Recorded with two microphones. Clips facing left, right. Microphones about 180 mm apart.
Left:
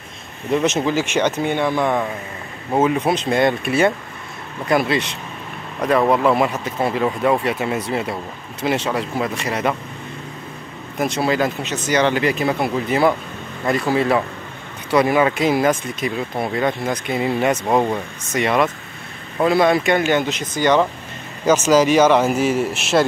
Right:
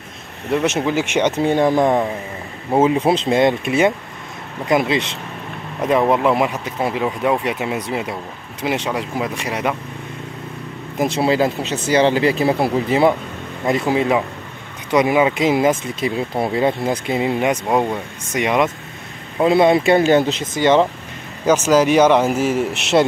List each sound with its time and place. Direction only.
0.5 s speech: 5° right (ahead or behind)
1.4 s speech: 40° right (ahead or behind)
2.7 s speech: 25° right (ahead or behind)
11.1 s speech: 25° right (ahead or behind)
20.5 s speech: 20° right (ahead or behind)